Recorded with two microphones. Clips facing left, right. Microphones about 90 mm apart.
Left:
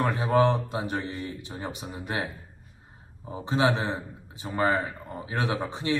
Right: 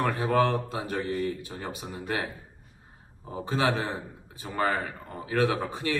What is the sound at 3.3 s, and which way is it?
Speech, 20° left (ahead or behind).